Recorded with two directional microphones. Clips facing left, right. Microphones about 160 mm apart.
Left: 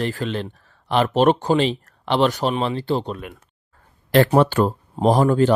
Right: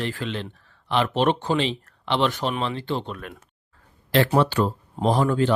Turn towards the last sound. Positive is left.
turn(degrees=40)  # may be behind; listen again after turning